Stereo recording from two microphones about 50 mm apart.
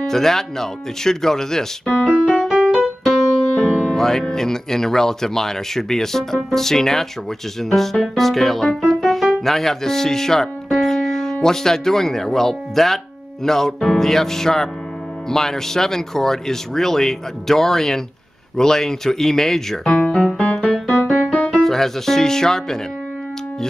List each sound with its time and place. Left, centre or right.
0.0 s speech: centre
2.1 s keyboard: right
2.7 s keyboard: centre
3.6 s speech: centre
8.2 s music: centre
11.4 s speech: centre
20.3 s keyboard: centre
21.1 s music: left
21.5 s speech: centre